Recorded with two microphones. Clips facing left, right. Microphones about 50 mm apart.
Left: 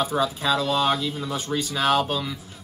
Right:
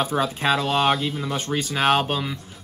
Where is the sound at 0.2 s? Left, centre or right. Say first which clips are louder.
Right 1 dB; right.